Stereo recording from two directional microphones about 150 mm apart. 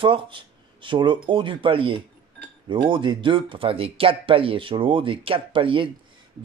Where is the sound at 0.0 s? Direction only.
35° right (ahead or behind).